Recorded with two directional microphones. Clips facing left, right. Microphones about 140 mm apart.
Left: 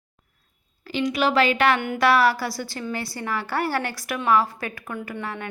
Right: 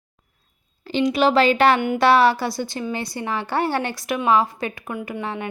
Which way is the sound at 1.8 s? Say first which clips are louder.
Right 3 dB; 15° right (ahead or behind).